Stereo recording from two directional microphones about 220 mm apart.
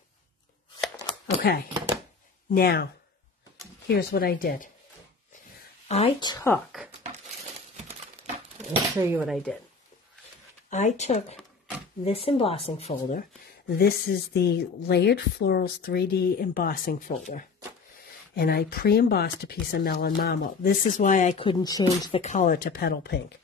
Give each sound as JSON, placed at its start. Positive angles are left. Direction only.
{"t": 1.4, "sound": "speech", "side_deg": 45}
{"t": 5.9, "sound": "speech", "side_deg": 25}
{"t": 7.0, "sound": "crumpling", "side_deg": -30}
{"t": 8.9, "sound": "speech", "side_deg": -10}
{"t": 10.7, "sound": "speech", "side_deg": 35}
{"t": 13.7, "sound": "speech", "side_deg": 45}
{"t": 22.2, "sound": "speech", "side_deg": 35}